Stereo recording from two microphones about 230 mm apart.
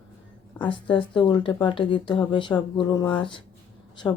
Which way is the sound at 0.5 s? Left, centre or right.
Left.